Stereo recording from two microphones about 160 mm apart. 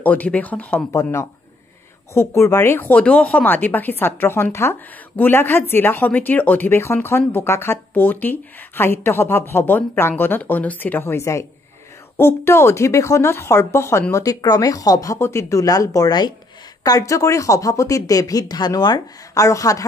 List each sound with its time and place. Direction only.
0.0 s speech: 10° left (ahead or behind)